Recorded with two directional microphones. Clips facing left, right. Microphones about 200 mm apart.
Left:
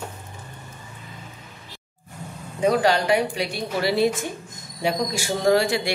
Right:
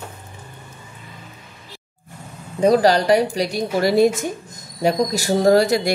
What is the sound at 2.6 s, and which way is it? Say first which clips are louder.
A woman's voice: right 5 dB; 35° right (ahead or behind).